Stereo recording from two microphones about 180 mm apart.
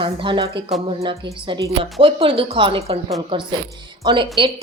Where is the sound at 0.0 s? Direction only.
30° right (ahead or behind).